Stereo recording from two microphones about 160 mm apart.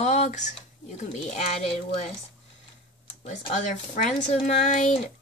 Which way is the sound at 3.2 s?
45° left (ahead or behind).